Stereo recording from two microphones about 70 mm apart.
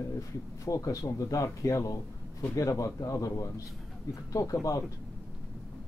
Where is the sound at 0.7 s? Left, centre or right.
Left.